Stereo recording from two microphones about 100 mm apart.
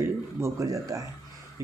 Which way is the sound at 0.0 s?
30° right (ahead or behind).